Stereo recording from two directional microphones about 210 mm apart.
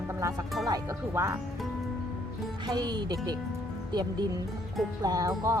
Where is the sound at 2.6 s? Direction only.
20° right (ahead or behind).